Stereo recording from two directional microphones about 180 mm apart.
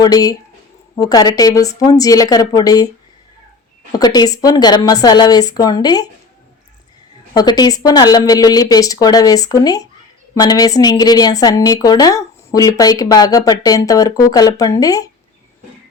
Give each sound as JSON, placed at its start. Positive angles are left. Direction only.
{"t": 0.0, "sound": "speech", "side_deg": 20}
{"t": 3.9, "sound": "speech", "side_deg": 20}
{"t": 7.3, "sound": "speech", "side_deg": 20}